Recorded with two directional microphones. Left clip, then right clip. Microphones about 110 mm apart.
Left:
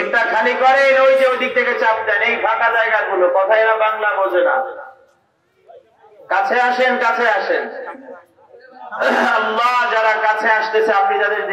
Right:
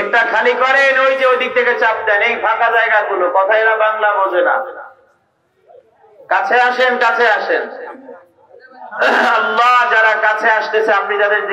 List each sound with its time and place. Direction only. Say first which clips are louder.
0.1 s a man's voice: right 3 dB; 35° right (ahead or behind)
6.2 s a man's voice: right 3 dB; 35° right (ahead or behind)
8.9 s a man's voice: right 3 dB; 40° right (ahead or behind)